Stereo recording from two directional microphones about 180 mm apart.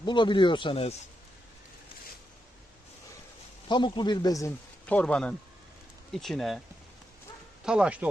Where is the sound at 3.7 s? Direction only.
25° left (ahead or behind).